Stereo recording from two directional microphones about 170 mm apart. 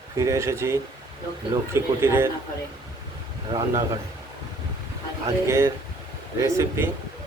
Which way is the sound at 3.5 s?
25° right (ahead or behind).